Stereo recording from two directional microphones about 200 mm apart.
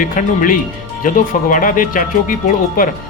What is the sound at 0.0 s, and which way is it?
Speech, 45° left (ahead or behind).